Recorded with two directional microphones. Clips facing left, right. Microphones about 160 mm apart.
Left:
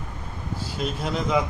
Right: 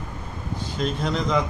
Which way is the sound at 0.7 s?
5° left (ahead or behind).